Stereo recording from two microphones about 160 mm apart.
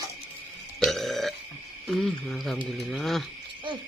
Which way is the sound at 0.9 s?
Centre (ahead or behind).